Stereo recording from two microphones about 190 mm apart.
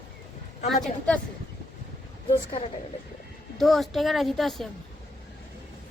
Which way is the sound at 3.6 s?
Centre (ahead or behind).